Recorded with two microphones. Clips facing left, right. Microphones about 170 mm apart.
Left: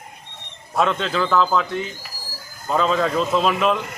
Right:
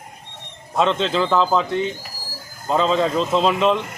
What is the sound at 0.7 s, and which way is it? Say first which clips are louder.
A man's voice: right 2 dB; 25° right (ahead or behind).